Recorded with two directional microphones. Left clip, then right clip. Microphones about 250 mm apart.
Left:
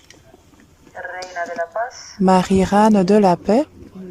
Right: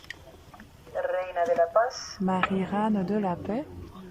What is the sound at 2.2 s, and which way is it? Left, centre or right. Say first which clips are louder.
Speech: left 12 dB; left.